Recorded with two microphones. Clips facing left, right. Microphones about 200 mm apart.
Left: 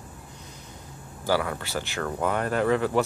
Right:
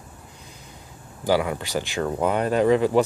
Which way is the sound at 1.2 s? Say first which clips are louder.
Right 4 dB; 15° right (ahead or behind).